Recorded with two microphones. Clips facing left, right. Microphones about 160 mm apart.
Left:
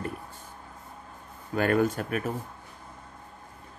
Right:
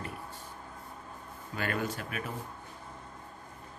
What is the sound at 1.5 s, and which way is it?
Speech, 50° left (ahead or behind).